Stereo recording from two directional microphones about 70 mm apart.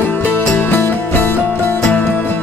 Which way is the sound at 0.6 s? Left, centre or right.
Left.